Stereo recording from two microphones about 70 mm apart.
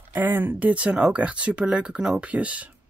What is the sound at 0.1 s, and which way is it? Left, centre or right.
Speech, right.